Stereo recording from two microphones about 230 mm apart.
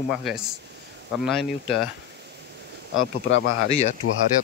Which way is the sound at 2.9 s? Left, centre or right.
Left.